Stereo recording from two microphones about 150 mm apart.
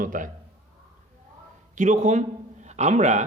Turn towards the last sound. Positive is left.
turn(degrees=-50)  # may be behind; listen again after turning